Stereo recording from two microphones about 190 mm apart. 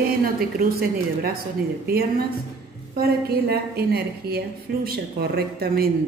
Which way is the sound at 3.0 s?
55° right (ahead or behind).